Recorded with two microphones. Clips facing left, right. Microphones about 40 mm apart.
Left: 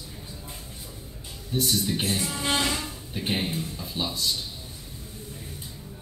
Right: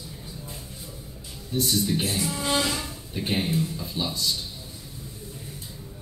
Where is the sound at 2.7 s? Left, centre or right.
Centre.